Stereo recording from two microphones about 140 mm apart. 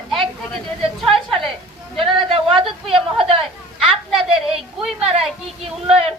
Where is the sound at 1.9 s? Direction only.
40° right (ahead or behind).